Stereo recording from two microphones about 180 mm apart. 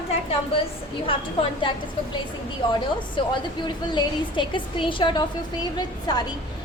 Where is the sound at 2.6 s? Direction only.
25° left (ahead or behind).